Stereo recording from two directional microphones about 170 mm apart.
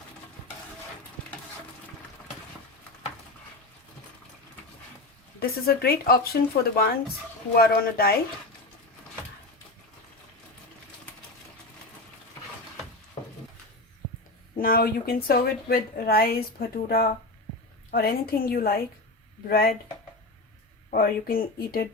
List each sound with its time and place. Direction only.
5.4 s a woman's voice: 65° left (ahead or behind)
14.6 s a woman's voice: 60° left (ahead or behind)
20.9 s a woman's voice: 60° left (ahead or behind)